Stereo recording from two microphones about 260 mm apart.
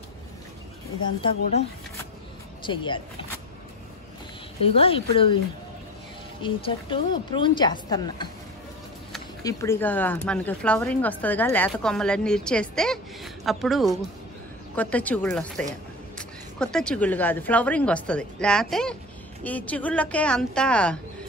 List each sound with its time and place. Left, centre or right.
2.6 s a woman's voice: centre
4.6 s a woman's voice: left
6.4 s a woman's voice: centre
9.4 s speech: centre